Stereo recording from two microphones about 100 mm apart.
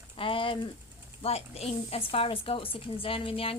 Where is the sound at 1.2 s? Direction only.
90° left.